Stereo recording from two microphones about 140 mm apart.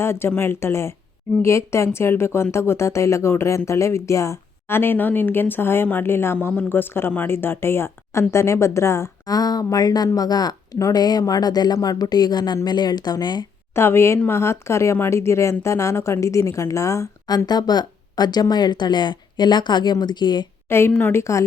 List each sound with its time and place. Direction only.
0.0 s a woman's voice: 15° left (ahead or behind)
13.7 s a woman's voice: 20° left (ahead or behind)
20.7 s speech: 15° left (ahead or behind)